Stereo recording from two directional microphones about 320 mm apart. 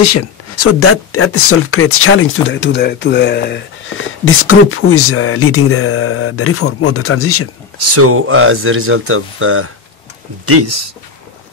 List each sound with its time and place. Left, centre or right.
0.0 s speech: left
7.8 s speech: right